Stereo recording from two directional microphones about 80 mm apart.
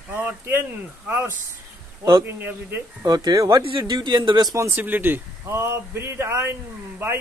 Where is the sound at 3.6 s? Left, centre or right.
Right.